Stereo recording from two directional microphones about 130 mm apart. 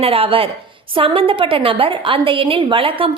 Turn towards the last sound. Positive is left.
turn(degrees=-45)  # may be behind; listen again after turning